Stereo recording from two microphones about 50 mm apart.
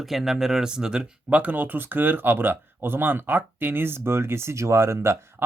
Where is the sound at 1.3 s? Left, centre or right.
Right.